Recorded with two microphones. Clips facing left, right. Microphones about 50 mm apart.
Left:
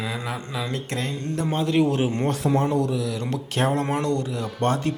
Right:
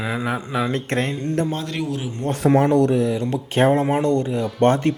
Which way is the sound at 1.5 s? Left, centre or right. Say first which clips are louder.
Left 4 dB; centre.